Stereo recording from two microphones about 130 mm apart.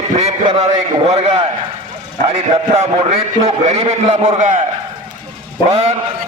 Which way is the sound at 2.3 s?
55° right (ahead or behind).